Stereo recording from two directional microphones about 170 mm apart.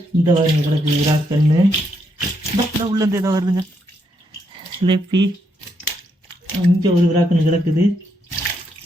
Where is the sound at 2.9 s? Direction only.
20° right (ahead or behind).